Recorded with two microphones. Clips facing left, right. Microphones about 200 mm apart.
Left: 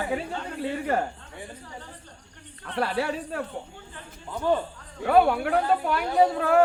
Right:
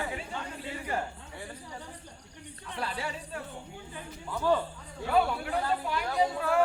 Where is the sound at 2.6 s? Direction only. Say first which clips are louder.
Left 9 dB; 65° left (ahead or behind).